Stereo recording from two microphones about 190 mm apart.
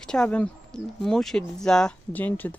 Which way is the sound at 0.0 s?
5° left (ahead or behind).